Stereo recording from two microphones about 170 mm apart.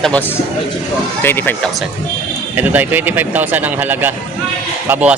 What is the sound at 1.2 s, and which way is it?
Speech, 10° left (ahead or behind).